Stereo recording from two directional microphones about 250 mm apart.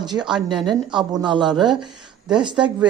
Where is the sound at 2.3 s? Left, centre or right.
Centre.